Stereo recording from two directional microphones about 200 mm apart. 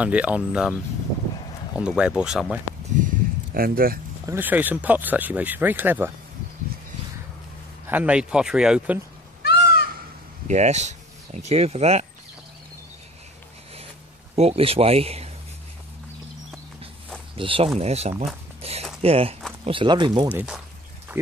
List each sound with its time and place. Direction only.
0.0 s speech: 5° right (ahead or behind)
1.8 s speech: 5° right (ahead or behind)
3.5 s speech: 45° right (ahead or behind)
4.3 s speech: 10° right (ahead or behind)
7.9 s speech: 5° right (ahead or behind)
9.4 s crow: 55° left (ahead or behind)
10.5 s speech: 35° right (ahead or behind)
14.3 s speech: 30° right (ahead or behind)
17.4 s speech: 25° right (ahead or behind)
18.6 s biting: 30° right (ahead or behind)
19.0 s speech: 30° right (ahead or behind)
20.2 s speech: 5° right (ahead or behind)
21.1 s a sound: 10° right (ahead or behind)